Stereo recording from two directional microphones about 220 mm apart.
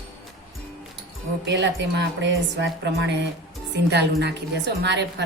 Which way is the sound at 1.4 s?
55° right (ahead or behind).